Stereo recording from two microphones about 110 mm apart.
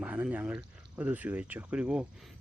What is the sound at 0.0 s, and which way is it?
Speech, 10° right (ahead or behind).